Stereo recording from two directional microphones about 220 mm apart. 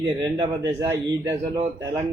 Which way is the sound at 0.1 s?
15° right (ahead or behind).